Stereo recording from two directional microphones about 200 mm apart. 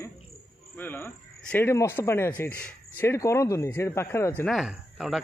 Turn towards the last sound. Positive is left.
turn(degrees=0)  # may be behind; listen again after turning